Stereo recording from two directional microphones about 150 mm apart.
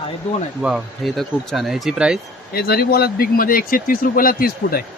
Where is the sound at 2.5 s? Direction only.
90° left.